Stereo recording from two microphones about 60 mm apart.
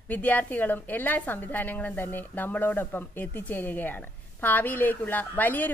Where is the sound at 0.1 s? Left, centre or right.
Left.